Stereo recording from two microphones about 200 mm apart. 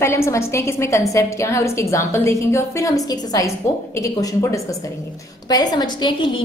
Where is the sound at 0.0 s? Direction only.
15° left (ahead or behind).